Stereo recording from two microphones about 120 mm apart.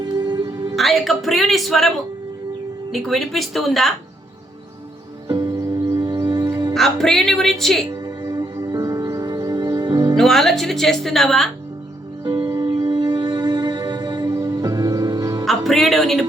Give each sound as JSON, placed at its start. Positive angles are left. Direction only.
{"t": 0.0, "sound": "music", "side_deg": -35}
{"t": 0.8, "sound": "speech", "side_deg": 0}
{"t": 2.9, "sound": "speech", "side_deg": 0}
{"t": 5.3, "sound": "music", "side_deg": -35}
{"t": 6.7, "sound": "speech", "side_deg": 0}
{"t": 8.0, "sound": "music", "side_deg": -35}
{"t": 10.2, "sound": "speech", "side_deg": 0}
{"t": 12.2, "sound": "music", "side_deg": -35}
{"t": 15.4, "sound": "music", "side_deg": 0}